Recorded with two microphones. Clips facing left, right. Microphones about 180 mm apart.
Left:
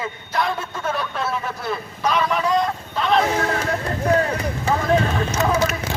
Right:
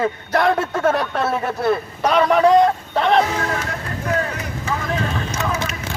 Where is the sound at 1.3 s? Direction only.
60° right (ahead or behind).